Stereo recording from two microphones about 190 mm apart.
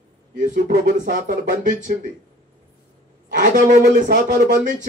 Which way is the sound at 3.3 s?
45° right (ahead or behind).